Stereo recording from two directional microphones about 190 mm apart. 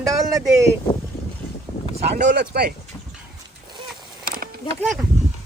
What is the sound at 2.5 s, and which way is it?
Speech, 60° right (ahead or behind).